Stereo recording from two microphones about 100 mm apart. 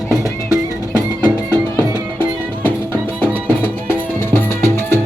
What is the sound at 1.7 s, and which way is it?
Music, 20° left (ahead or behind).